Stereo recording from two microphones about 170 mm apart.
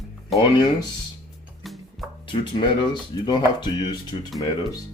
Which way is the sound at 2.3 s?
30° left (ahead or behind).